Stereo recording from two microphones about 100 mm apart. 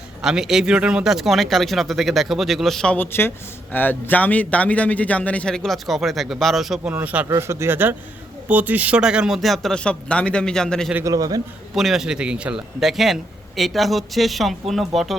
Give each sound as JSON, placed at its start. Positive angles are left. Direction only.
{"t": 0.2, "sound": "speech", "side_deg": -5}
{"t": 3.1, "sound": "a man's voice", "side_deg": 20}
{"t": 7.0, "sound": "a man's voice", "side_deg": -15}
{"t": 7.3, "sound": "speech", "side_deg": -30}
{"t": 11.0, "sound": "a man's voice", "side_deg": -35}
{"t": 11.7, "sound": "speech", "side_deg": 0}